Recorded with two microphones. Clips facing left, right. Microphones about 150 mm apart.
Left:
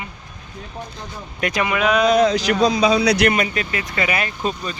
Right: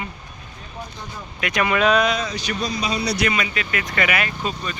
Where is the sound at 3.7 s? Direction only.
25° left (ahead or behind).